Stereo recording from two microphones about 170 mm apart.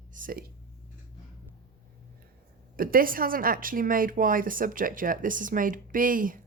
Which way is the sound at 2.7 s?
55° right (ahead or behind).